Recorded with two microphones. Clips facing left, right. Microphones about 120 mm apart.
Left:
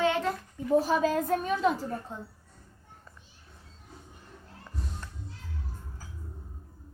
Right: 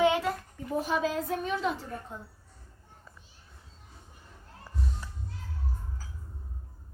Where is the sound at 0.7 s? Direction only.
35° left (ahead or behind).